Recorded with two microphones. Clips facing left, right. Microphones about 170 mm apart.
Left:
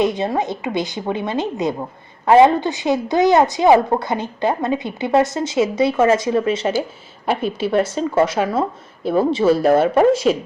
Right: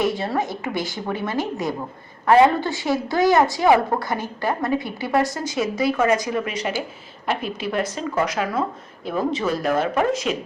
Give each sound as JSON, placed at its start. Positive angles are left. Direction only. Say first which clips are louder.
{"t": 0.0, "sound": "a woman's voice", "louder": "left 4 dB", "side_deg": 20}
{"t": 10.3, "sound": "speech", "louder": "left 8 dB", "side_deg": 40}